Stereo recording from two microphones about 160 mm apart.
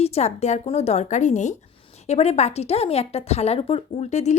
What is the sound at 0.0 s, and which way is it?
A woman's voice, 40° left (ahead or behind).